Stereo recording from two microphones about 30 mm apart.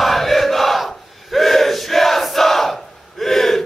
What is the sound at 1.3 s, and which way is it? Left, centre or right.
Battle cry, centre.